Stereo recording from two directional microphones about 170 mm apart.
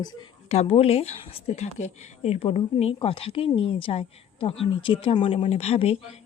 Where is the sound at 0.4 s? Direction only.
40° left (ahead or behind).